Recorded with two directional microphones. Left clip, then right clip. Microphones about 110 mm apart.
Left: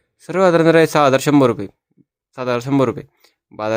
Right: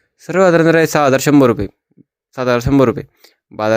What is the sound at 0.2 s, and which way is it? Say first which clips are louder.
A man's voice: right 3 dB; 20° right (ahead or behind).